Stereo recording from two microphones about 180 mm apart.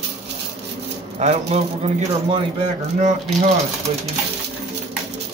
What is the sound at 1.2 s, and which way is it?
Speech, 35° right (ahead or behind).